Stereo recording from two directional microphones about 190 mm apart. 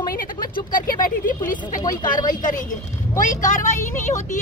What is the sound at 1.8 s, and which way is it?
Speech, 20° left (ahead or behind).